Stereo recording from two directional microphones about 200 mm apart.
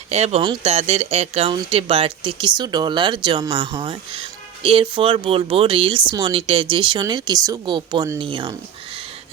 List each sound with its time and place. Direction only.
0.1 s speech: 30° right (ahead or behind)